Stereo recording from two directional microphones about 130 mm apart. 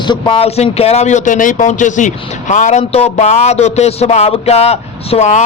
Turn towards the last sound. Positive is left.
turn(degrees=65)  # may be behind; listen again after turning